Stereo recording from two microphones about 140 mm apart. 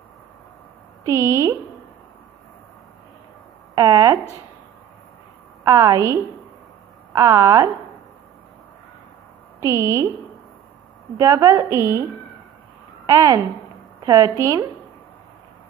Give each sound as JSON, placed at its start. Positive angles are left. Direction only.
{"t": 1.0, "sound": "a woman's voice", "side_deg": -20}
{"t": 3.7, "sound": "a woman's voice", "side_deg": -25}
{"t": 5.7, "sound": "a woman's voice", "side_deg": -25}
{"t": 9.6, "sound": "a woman's voice", "side_deg": -20}
{"t": 11.1, "sound": "a woman's voice", "side_deg": -25}